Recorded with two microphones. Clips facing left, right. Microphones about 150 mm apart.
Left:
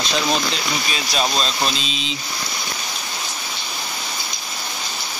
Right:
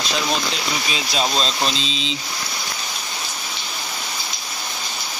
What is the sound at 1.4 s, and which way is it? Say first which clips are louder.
Speech: even; 25° right (ahead or behind).